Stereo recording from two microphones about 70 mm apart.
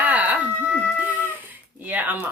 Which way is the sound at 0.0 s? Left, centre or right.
Right.